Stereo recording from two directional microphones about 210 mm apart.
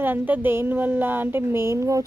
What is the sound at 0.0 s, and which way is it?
A woman's voice, 10° right (ahead or behind).